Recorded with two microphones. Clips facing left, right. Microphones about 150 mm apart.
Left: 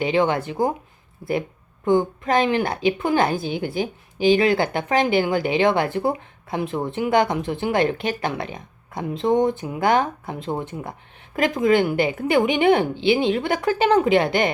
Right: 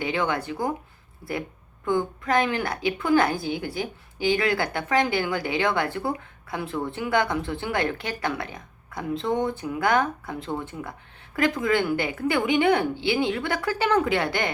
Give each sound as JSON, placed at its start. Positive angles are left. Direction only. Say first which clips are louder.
{"t": 0.0, "sound": "a woman's voice", "louder": "left 6 dB", "side_deg": 25}